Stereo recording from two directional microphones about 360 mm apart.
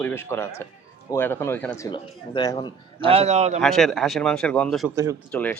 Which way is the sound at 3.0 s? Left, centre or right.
Centre.